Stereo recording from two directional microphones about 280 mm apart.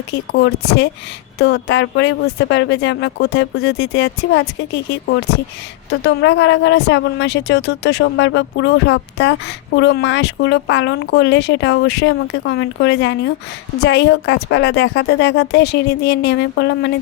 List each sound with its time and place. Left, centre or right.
0.1 s a woman's voice: left